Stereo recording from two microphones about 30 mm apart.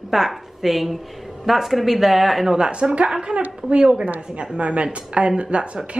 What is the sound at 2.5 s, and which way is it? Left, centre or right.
Speech, right.